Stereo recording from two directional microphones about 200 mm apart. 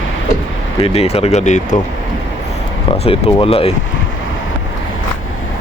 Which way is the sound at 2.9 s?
30° left (ahead or behind).